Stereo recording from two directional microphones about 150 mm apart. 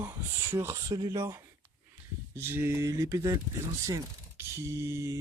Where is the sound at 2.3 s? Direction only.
15° right (ahead or behind).